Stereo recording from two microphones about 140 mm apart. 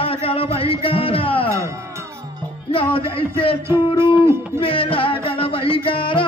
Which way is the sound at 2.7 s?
40° left (ahead or behind).